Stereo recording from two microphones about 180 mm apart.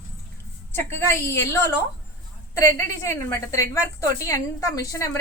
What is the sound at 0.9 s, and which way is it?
A woman's voice, 15° left (ahead or behind).